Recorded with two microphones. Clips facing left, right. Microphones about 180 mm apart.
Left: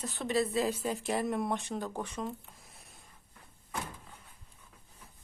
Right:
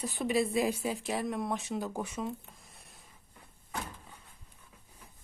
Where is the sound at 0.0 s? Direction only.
10° right (ahead or behind).